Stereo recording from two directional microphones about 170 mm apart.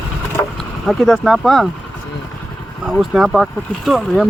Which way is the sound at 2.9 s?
Centre (ahead or behind).